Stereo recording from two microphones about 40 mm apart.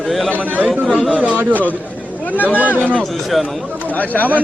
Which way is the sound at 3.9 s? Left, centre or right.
Left.